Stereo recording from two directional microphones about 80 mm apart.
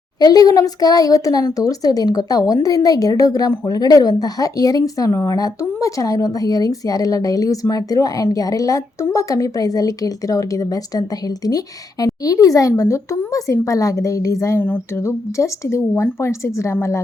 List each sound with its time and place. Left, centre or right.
0.2 s speech: left
14.6 s a sound: left
15.0 s a woman's voice: left